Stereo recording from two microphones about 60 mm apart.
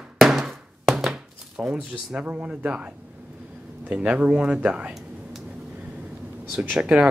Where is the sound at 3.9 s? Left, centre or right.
Right.